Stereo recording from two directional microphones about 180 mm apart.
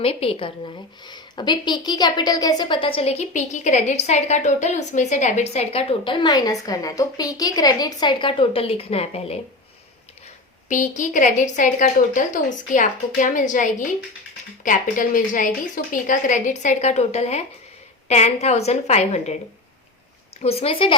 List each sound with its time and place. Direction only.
0.0 s a woman's voice: 30° left (ahead or behind)
10.7 s a woman's voice: 45° left (ahead or behind)
20.4 s a woman's voice: 35° left (ahead or behind)